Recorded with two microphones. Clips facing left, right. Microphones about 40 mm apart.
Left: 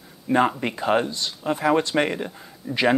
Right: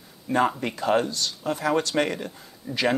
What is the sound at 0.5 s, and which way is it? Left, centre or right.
Speech, centre.